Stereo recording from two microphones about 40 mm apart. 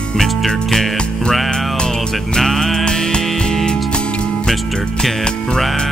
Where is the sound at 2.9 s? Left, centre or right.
Centre.